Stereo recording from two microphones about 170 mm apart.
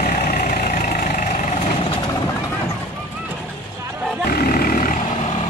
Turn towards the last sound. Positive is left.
turn(degrees=55)  # may be behind; listen again after turning